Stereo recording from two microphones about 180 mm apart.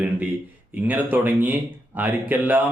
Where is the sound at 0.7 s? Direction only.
10° right (ahead or behind).